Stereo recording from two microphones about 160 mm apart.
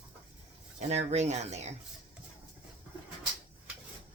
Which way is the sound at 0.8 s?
45° right (ahead or behind).